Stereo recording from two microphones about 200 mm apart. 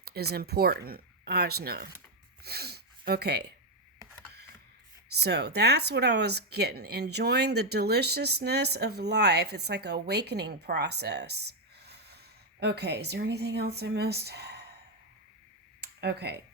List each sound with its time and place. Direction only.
0.0 s speech: 50° right (ahead or behind)
5.1 s speech: 55° right (ahead or behind)
12.5 s speech: 55° right (ahead or behind)
15.8 s a sound: 55° right (ahead or behind)